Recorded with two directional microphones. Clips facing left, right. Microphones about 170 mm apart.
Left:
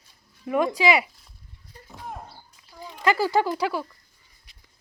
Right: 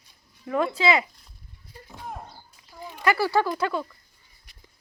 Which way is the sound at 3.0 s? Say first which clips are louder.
Left 1 dB; 15° left (ahead or behind).